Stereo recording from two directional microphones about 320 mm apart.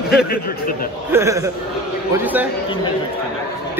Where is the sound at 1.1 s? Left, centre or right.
Centre.